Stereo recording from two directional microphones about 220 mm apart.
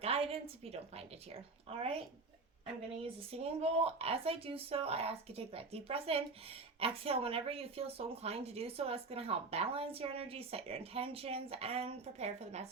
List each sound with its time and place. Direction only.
0.0 s speech: 25° right (ahead or behind)
3.0 s speech: 25° right (ahead or behind)